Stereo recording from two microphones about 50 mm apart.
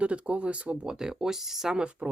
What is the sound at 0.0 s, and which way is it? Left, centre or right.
Speech, right.